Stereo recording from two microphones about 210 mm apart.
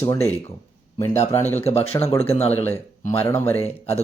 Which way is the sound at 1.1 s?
30° left (ahead or behind).